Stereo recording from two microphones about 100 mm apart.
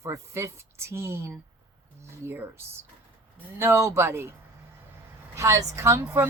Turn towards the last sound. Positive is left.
turn(degrees=-25)  # may be behind; listen again after turning